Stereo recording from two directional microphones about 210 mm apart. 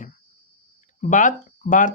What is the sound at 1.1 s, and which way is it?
Speech, 35° left (ahead or behind).